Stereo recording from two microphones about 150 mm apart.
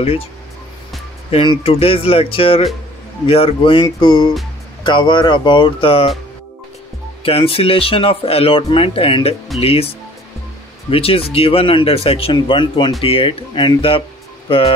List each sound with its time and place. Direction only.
1.3 s speech: 35° left (ahead or behind)
7.2 s speech: 40° left (ahead or behind)
10.9 s speech: 40° left (ahead or behind)